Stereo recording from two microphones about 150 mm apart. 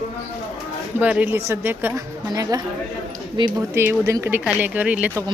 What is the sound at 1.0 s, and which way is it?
Speech, 10° right (ahead or behind).